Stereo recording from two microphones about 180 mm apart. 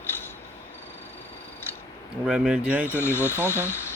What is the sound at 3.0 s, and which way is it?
Speech, 15° left (ahead or behind).